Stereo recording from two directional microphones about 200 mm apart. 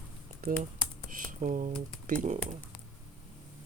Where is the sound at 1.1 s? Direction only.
40° right (ahead or behind).